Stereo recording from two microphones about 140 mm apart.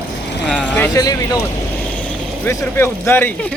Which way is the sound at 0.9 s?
25° left (ahead or behind).